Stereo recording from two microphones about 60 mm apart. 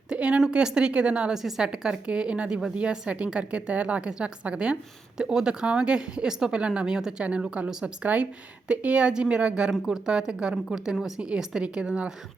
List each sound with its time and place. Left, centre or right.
0.1 s a woman's voice: centre
1.3 s a woman's voice: centre